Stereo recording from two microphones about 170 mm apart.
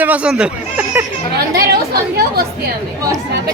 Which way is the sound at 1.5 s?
70° right (ahead or behind).